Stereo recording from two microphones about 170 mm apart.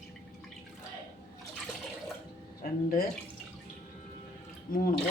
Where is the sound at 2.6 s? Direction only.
60° left (ahead or behind).